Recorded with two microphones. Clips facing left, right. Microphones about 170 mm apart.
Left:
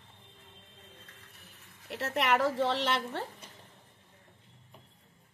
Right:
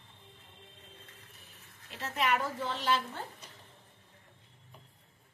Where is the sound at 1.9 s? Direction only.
70° left (ahead or behind).